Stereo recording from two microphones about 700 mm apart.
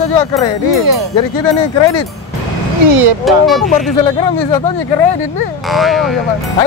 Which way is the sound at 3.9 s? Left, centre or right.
Left.